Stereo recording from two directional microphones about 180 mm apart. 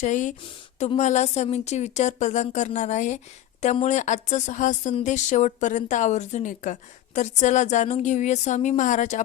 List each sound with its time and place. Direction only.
0.0 s speech: 40° left (ahead or behind)